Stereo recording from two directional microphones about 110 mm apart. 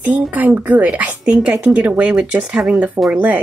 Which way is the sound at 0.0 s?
15° right (ahead or behind).